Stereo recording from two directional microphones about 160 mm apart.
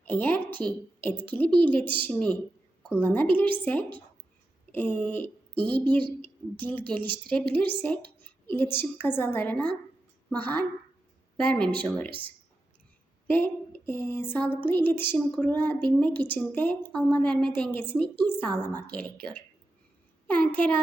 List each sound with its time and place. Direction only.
0.0 s speech: 10° left (ahead or behind)
13.2 s a sound: 10° left (ahead or behind)
14.5 s speech: 10° left (ahead or behind)